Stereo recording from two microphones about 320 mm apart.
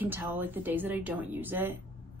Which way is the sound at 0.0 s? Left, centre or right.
Centre.